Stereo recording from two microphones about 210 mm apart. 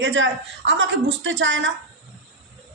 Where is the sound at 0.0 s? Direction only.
60° right (ahead or behind).